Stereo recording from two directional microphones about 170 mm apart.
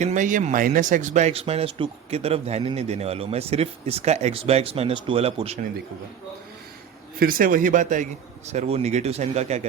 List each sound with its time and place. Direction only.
0.0 s speech: 45° right (ahead or behind)
7.2 s a man's voice: 55° right (ahead or behind); by 9.6 s 40° right (ahead or behind)